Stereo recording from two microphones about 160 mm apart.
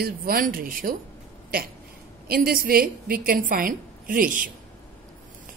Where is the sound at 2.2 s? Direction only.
65° right (ahead or behind).